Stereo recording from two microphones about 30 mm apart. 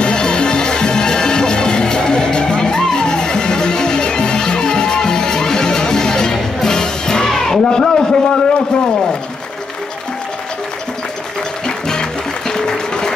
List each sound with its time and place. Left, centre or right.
0.0 s music: left; by 7.6 s centre
7.7 s a sound: left
11.6 s music: left